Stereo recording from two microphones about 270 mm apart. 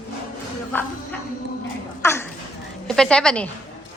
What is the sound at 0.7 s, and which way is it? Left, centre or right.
Speech, centre.